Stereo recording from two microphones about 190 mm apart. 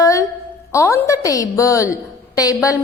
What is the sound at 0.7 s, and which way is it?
A woman's voice, 15° left (ahead or behind).